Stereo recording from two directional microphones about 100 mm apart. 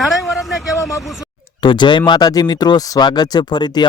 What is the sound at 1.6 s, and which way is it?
Speech, 50° left (ahead or behind).